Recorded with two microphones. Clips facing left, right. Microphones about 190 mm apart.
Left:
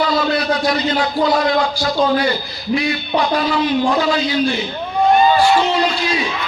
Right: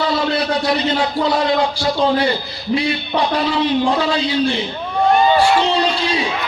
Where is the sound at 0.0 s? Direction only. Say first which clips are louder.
Left 1 dB; 25° right (ahead or behind).